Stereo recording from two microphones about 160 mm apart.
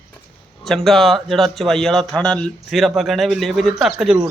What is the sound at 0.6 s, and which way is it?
Speech, centre (ahead or behind).